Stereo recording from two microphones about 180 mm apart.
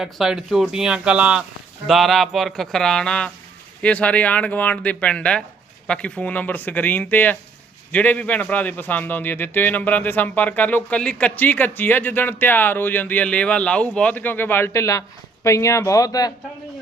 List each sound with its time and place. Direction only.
0.0 s a man's voice: centre (ahead or behind); by 16.3 s 20° left (ahead or behind)